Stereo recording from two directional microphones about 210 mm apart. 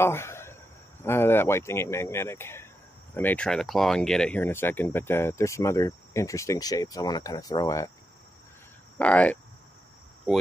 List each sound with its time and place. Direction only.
0.0 s a sound: 10° left (ahead or behind)
1.0 s speech: 10° left (ahead or behind)
8.9 s speech: 5° left (ahead or behind)